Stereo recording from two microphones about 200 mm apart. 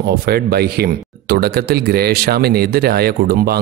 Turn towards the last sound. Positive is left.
turn(degrees=-50)  # may be behind; listen again after turning